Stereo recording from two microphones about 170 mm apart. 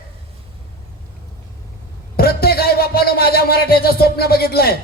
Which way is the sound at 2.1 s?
65° left (ahead or behind).